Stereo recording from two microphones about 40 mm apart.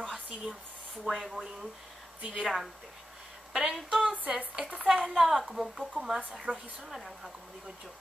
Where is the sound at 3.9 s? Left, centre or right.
Centre.